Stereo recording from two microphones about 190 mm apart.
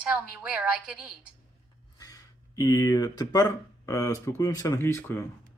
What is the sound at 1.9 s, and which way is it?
Speech, 20° left (ahead or behind).